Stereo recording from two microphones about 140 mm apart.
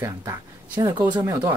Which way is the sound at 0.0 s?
20° right (ahead or behind).